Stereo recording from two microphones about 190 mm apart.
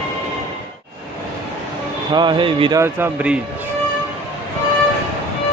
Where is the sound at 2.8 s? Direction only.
10° right (ahead or behind).